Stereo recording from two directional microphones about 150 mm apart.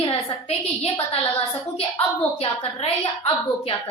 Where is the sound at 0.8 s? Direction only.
40° left (ahead or behind).